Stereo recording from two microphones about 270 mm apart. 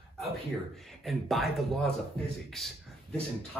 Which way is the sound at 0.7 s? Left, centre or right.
Centre.